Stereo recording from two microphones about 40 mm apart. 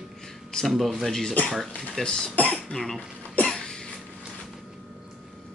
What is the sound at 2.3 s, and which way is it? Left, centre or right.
Cough, left.